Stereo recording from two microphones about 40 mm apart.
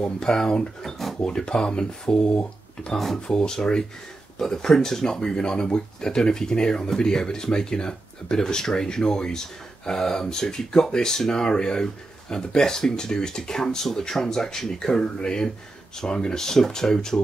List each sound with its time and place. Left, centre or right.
0.0 s speech: centre
1.2 s speech: centre